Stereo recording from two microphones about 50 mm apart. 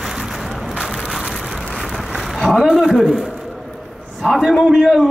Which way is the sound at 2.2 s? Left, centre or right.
Centre.